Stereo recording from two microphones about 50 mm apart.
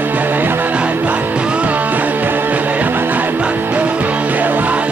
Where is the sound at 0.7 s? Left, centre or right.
Right.